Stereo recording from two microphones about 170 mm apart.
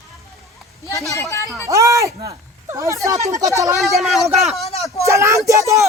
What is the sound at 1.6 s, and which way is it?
Speech, 20° right (ahead or behind).